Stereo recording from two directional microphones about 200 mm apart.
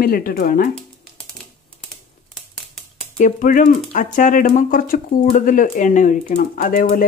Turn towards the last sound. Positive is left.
turn(degrees=40)  # may be behind; listen again after turning